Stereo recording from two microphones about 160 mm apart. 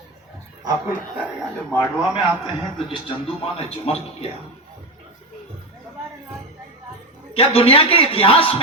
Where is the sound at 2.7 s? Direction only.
35° left (ahead or behind).